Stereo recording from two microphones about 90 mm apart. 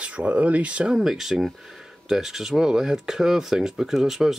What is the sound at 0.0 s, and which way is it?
Speech, 15° right (ahead or behind).